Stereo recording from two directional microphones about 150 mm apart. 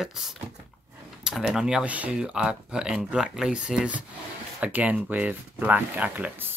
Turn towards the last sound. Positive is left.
turn(degrees=-10)  # may be behind; listen again after turning